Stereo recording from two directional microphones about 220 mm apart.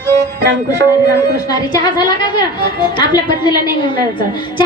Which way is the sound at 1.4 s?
20° left (ahead or behind).